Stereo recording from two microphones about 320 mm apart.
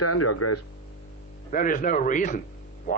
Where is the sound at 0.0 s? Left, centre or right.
Left.